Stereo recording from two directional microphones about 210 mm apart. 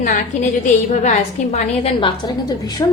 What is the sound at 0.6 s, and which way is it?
A woman's voice, 35° left (ahead or behind).